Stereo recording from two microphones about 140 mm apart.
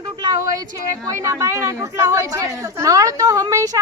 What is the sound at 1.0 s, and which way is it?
Speech, 20° right (ahead or behind).